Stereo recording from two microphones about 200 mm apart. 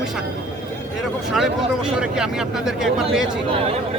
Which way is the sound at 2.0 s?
5° right (ahead or behind).